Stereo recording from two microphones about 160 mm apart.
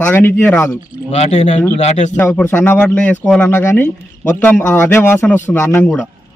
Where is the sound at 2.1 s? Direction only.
10° left (ahead or behind).